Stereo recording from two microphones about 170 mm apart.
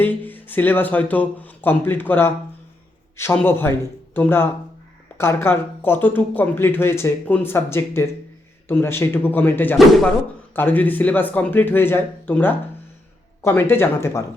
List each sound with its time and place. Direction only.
0.0 s speech: 10° left (ahead or behind)
9.7 s speech: centre (ahead or behind)
10.5 s speech: 10° left (ahead or behind)